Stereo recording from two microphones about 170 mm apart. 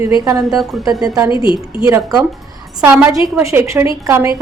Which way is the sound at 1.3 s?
30° left (ahead or behind).